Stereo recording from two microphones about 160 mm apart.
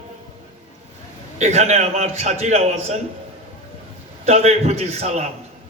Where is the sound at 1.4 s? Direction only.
45° right (ahead or behind).